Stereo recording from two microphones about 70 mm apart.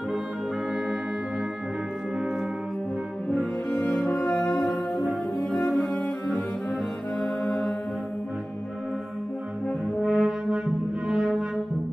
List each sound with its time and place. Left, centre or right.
3.3 s french horn: centre
3.8 s music: centre
4.1 s french horn: centre
4.6 s music: centre
7.2 s music: centre
9.7 s french horn: centre